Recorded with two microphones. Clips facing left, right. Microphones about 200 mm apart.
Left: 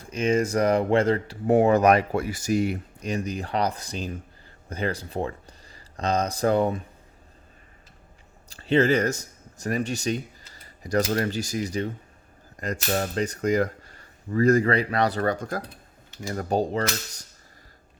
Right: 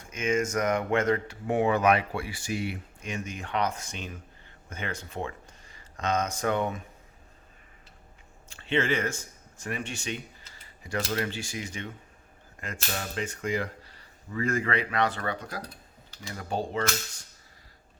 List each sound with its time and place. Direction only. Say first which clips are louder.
0.0 s speech: left 5 dB; 35° left (ahead or behind)
8.4 s speech: left 7 dB; 40° left (ahead or behind)